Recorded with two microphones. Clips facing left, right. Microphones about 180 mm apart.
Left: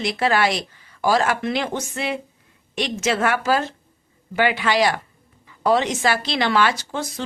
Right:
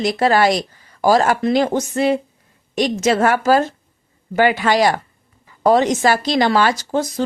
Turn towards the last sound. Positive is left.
turn(degrees=-40)  # may be behind; listen again after turning